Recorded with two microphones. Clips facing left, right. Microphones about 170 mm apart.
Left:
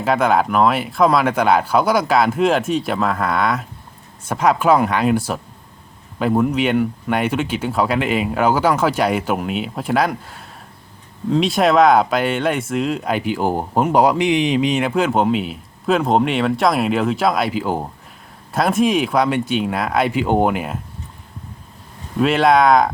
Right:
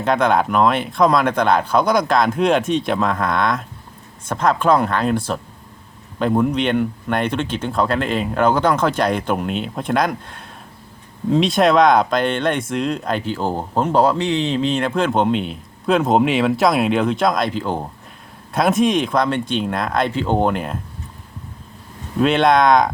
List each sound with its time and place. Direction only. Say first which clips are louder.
0.0 s speech: even; 5° left (ahead or behind)
22.2 s speech: even; 5° left (ahead or behind)